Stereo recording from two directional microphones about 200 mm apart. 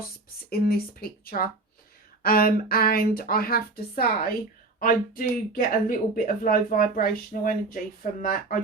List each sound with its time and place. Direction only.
0.5 s a woman's voice: 50° left (ahead or behind)